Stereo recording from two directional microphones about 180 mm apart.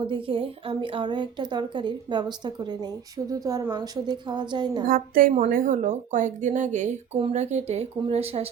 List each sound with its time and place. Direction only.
0.1 s a woman's voice: 30° right (ahead or behind)
4.9 s speech: 50° right (ahead or behind); by 8.4 s 35° right (ahead or behind)